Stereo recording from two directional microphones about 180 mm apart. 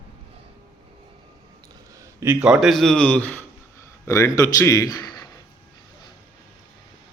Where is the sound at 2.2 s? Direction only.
10° right (ahead or behind); by 5.1 s 20° left (ahead or behind).